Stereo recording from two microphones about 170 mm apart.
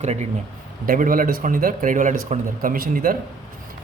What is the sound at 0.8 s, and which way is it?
Speech, 55° right (ahead or behind).